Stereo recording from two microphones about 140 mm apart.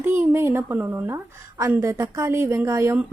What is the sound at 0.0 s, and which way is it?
A woman's voice, 15° right (ahead or behind).